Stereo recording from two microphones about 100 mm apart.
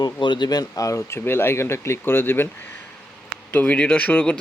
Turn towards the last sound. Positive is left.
turn(degrees=10)  # may be behind; listen again after turning